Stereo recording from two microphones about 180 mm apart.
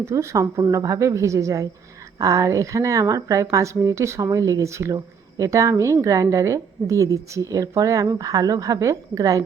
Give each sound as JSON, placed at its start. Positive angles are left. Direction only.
{"t": 0.0, "sound": "speech", "side_deg": -15}